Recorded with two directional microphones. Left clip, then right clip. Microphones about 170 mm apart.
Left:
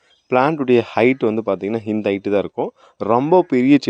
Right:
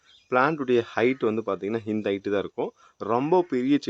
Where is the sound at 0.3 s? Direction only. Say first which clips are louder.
Left 7 dB; 35° left (ahead or behind).